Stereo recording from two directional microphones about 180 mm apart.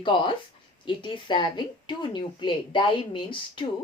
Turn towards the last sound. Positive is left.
turn(degrees=25)  # may be behind; listen again after turning